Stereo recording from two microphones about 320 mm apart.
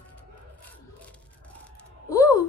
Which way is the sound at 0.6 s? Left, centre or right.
Centre.